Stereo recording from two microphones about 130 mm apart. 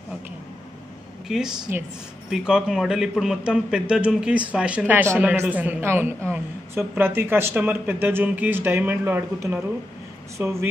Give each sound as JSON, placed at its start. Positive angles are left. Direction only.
{"t": 1.7, "sound": "a man's voice", "side_deg": -15}
{"t": 2.2, "sound": "a man's voice", "side_deg": -5}